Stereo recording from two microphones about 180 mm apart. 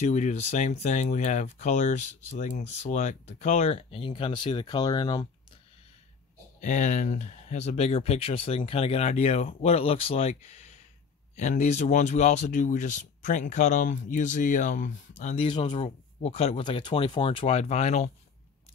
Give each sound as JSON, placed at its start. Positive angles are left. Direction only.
{"t": 0.0, "sound": "speech", "side_deg": 40}
{"t": 6.6, "sound": "speech", "side_deg": 45}
{"t": 15.4, "sound": "speech", "side_deg": 25}